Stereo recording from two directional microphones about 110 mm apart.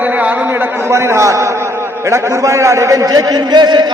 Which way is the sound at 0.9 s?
25° right (ahead or behind).